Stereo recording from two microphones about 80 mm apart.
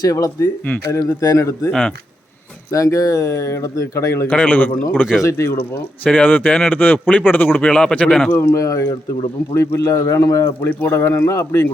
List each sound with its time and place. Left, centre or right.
0.0 s speech: left
2.7 s speech: left
4.3 s speech: centre
8.3 s speech: left
8.5 s speech: left
10.6 s speech: left